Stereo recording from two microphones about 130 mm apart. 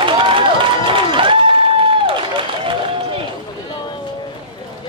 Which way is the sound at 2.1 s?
40° right (ahead or behind).